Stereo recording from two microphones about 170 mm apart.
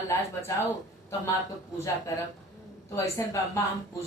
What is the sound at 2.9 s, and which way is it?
Speech, 15° left (ahead or behind).